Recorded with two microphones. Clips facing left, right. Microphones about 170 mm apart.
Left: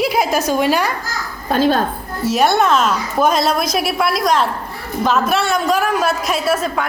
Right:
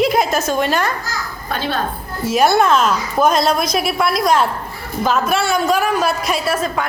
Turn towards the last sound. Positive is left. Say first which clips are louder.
# left 1 dB
turn(degrees=5)  # may be behind; listen again after turning